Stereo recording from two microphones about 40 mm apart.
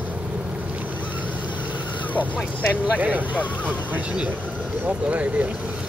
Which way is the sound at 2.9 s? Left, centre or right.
Right.